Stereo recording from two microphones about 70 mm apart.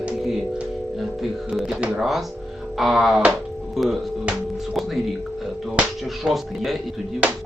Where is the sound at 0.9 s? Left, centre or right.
Centre.